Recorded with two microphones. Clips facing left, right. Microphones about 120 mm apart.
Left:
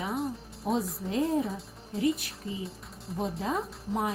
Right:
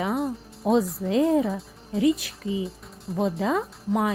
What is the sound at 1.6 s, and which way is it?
Music, centre (ahead or behind).